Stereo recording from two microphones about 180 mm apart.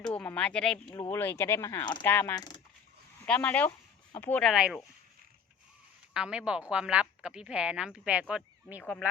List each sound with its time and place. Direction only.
0.1 s speech: 5° left (ahead or behind)
0.9 s speech: 20° left (ahead or behind)
2.0 s speech: 15° left (ahead or behind)
3.2 s speech: 10° left (ahead or behind)
6.1 s speech: 5° right (ahead or behind)